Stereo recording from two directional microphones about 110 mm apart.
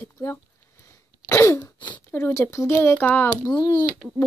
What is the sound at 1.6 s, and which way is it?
Throat clearing, 45° left (ahead or behind).